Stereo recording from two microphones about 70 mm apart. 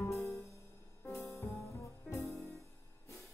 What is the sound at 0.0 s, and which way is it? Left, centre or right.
Music, left.